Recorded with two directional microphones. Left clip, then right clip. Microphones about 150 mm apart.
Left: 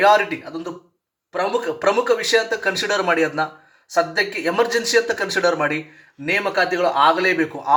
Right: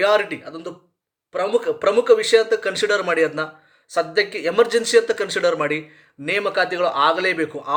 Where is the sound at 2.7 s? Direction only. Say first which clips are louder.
Left 1 dB; 25° right (ahead or behind).